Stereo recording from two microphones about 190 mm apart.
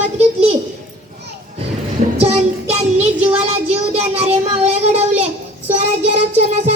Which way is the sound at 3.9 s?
35° right (ahead or behind).